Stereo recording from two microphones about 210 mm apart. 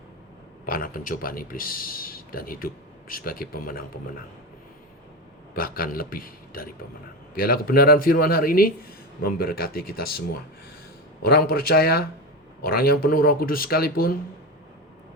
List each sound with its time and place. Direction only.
0.6 s speech: 45° left (ahead or behind)
5.5 s speech: 45° left (ahead or behind)
11.3 s speech: 45° left (ahead or behind)